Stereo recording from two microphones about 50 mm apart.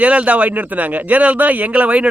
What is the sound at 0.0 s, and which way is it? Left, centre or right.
A man's voice, right.